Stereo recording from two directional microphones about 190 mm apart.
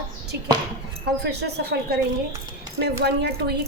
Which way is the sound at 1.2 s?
60° right (ahead or behind).